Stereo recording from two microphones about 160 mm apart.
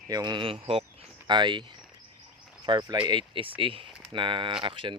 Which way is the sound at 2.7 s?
25° right (ahead or behind).